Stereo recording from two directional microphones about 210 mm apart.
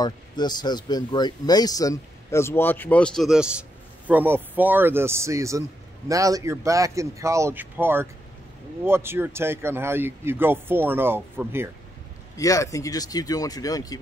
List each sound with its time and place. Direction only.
0.0 s speech: 20° left (ahead or behind); by 11.7 s 10° right (ahead or behind)
12.4 s speech: 15° left (ahead or behind)